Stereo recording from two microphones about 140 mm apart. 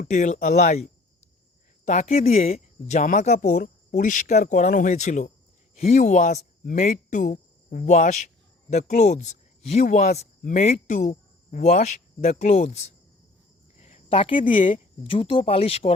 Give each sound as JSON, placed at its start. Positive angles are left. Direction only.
{"t": 0.1, "sound": "speech", "side_deg": 55}
{"t": 13.7, "sound": "cricket", "side_deg": 55}
{"t": 14.4, "sound": "speech", "side_deg": 70}
{"t": 15.1, "sound": "speech", "side_deg": 40}